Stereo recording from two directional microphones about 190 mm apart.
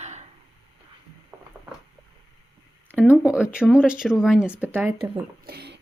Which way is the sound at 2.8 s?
10° right (ahead or behind).